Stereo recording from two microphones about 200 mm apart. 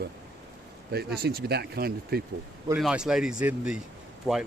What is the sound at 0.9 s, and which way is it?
Speech, 55° right (ahead or behind).